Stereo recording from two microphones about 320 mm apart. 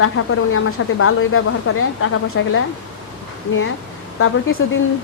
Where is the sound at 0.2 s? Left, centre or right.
Left.